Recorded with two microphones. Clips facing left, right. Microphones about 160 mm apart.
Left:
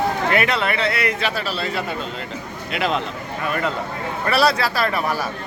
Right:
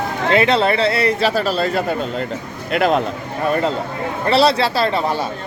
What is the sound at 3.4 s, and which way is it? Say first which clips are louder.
A man's voice: right 6 dB; 30° right (ahead or behind).